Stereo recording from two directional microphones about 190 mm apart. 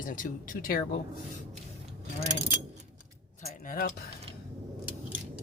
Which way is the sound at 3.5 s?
45° left (ahead or behind).